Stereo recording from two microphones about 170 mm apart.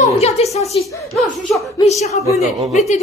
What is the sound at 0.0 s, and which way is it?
Speech, 40° left (ahead or behind).